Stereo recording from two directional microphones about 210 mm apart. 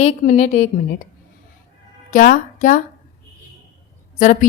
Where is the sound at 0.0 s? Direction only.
35° left (ahead or behind).